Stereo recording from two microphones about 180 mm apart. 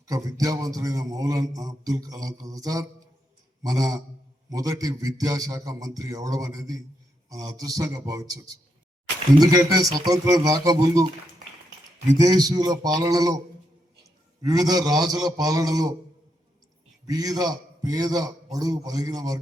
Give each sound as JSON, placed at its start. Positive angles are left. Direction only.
{"t": 0.1, "sound": "a man's voice", "side_deg": -20}
{"t": 12.1, "sound": "a man's voice", "side_deg": -20}
{"t": 14.4, "sound": "a man's voice", "side_deg": -20}
{"t": 17.1, "sound": "a man's voice", "side_deg": -20}